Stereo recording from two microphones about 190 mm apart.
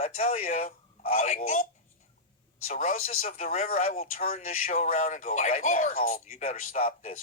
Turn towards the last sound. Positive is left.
turn(degrees=35)  # may be behind; listen again after turning